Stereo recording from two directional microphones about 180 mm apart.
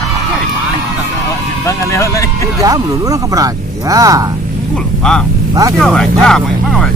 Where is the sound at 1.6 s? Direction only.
15° left (ahead or behind).